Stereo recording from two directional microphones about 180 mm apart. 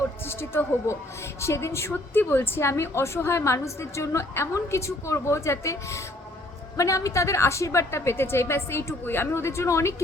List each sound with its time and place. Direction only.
0.3 s a woman's voice: 15° left (ahead or behind)